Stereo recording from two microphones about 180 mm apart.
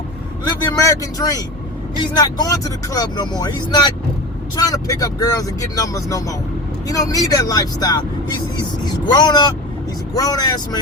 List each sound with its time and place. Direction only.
0.4 s speech: 20° left (ahead or behind)